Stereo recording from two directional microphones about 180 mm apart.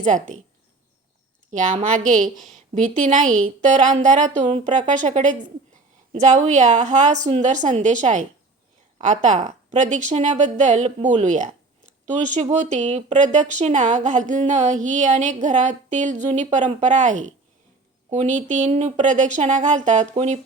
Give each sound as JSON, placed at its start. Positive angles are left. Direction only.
{"t": 1.5, "sound": "a woman's voice", "side_deg": -45}